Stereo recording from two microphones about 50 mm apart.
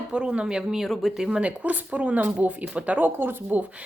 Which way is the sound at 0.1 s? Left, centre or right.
Centre.